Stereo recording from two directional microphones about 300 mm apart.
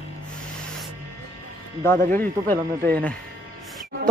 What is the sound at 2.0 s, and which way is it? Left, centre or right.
Speech, right.